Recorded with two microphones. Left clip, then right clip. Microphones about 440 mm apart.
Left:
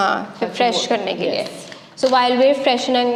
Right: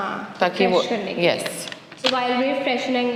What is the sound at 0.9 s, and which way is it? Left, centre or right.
Speech, left.